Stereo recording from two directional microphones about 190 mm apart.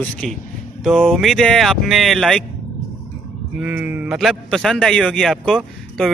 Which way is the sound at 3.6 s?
10° right (ahead or behind).